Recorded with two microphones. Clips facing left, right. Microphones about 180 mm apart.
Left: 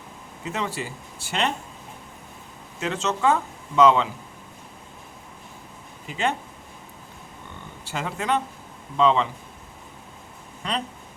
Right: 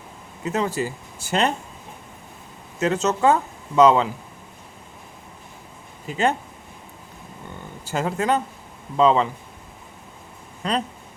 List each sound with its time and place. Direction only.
0.5 s speech: 40° right (ahead or behind)
2.8 s speech: 40° right (ahead or behind)
6.1 s speech: 40° right (ahead or behind)
7.9 s speech: 40° right (ahead or behind)
10.6 s speech: 40° right (ahead or behind)